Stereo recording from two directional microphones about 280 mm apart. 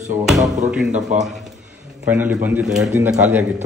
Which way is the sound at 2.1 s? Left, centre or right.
Centre.